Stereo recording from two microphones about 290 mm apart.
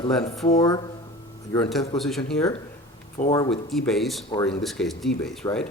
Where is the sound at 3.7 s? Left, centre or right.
Centre.